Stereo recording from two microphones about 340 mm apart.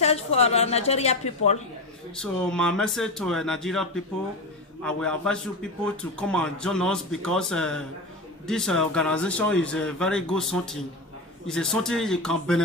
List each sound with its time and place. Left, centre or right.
0.0 s a woman's voice: centre
2.1 s a man's voice: centre